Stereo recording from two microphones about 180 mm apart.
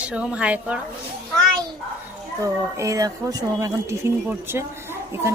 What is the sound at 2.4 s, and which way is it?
A woman's voice, 15° right (ahead or behind).